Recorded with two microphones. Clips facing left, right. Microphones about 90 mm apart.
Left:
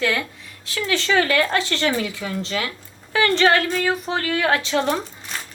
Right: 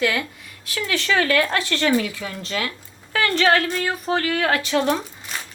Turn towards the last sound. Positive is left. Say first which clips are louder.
# even
turn(degrees=25)  # may be behind; listen again after turning